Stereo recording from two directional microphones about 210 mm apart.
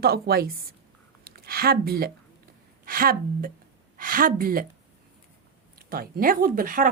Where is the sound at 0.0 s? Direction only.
50° right (ahead or behind).